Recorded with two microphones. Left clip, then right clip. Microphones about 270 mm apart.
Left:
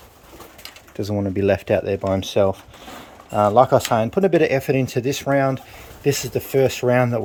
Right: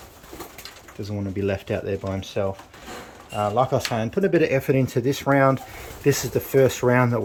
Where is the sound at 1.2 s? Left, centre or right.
Centre.